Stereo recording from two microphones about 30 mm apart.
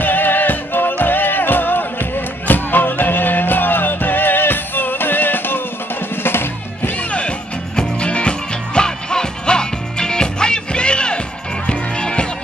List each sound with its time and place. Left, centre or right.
0.0 s music: left
7.0 s music: left